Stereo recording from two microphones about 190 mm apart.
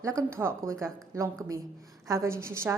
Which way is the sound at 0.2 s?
15° right (ahead or behind).